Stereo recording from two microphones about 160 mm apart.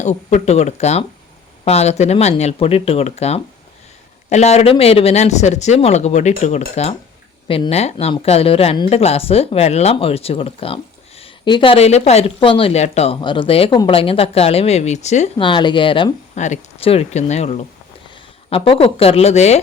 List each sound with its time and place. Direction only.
0.0 s a woman's voice: 45° left (ahead or behind)
13.2 s a woman's voice: 30° left (ahead or behind)
15.4 s a woman's voice: 30° left (ahead or behind)
16.3 s a woman's voice: 45° left (ahead or behind)